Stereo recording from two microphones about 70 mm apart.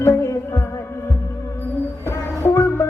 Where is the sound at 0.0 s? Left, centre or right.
Left.